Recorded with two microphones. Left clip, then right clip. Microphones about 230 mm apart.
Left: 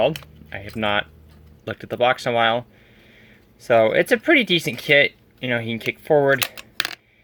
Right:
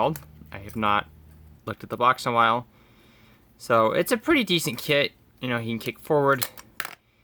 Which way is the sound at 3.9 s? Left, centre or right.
Centre.